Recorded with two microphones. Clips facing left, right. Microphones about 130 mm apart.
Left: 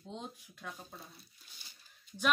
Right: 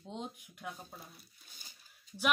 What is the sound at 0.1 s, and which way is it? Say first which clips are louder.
Speech: right 2 dB; 15° right (ahead or behind).